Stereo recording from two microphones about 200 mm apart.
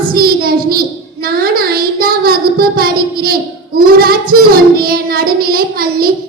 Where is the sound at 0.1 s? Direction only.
50° right (ahead or behind).